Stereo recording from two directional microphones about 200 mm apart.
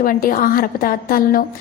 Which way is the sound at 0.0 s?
45° left (ahead or behind).